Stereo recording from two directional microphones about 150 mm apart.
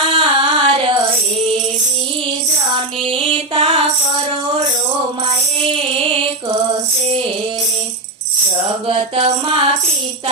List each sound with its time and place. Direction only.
0.0 s singing: 35° right (ahead or behind)
3.0 s mantra: 35° right (ahead or behind)
5.6 s music: 35° right (ahead or behind)
8.9 s music: 35° right (ahead or behind)